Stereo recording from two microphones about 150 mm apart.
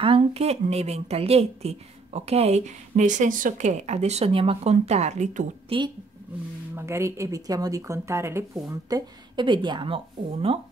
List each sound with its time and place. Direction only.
0.0 s a woman's voice: 40° right (ahead or behind)
5.7 s speech: 40° right (ahead or behind)
6.7 s speech: 20° right (ahead or behind); by 10.6 s 40° right (ahead or behind)